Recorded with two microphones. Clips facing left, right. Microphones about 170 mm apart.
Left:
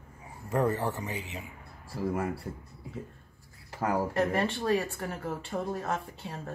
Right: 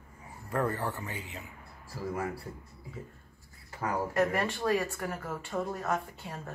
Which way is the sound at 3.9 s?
25° left (ahead or behind).